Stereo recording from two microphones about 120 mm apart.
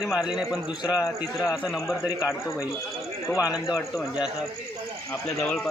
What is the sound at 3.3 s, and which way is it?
Speech, 25° left (ahead or behind).